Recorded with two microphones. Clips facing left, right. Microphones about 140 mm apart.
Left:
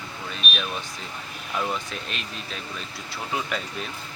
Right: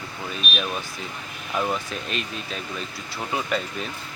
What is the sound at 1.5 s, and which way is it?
Speech, 10° right (ahead or behind).